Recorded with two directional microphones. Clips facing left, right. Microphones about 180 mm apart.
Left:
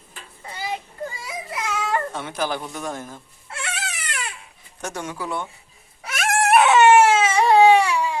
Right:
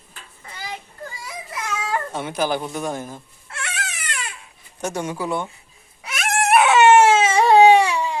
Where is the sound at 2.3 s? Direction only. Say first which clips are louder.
Right 3 dB; 5° right (ahead or behind).